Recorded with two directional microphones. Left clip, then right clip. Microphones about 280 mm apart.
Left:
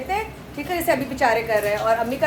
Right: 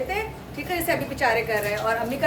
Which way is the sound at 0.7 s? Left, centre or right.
Centre.